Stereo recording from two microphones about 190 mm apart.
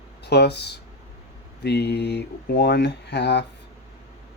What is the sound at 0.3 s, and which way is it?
Speech, 60° left (ahead or behind).